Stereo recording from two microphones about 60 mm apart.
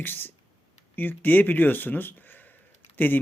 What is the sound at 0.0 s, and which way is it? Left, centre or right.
Speech, left.